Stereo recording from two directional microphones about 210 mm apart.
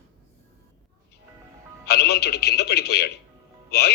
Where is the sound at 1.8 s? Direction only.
50° left (ahead or behind).